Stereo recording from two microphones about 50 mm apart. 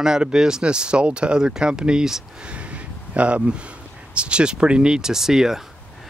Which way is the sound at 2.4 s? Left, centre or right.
Right.